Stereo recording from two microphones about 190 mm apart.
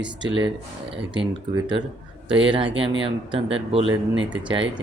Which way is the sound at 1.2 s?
25° right (ahead or behind).